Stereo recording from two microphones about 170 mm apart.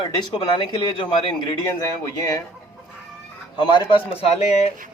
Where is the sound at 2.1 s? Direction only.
20° left (ahead or behind).